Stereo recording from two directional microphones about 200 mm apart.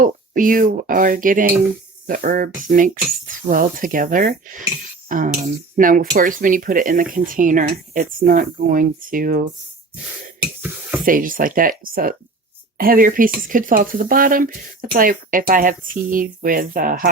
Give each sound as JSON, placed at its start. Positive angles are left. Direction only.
{"t": 0.0, "sound": "speech", "side_deg": -45}
{"t": 11.0, "sound": "speech", "side_deg": -45}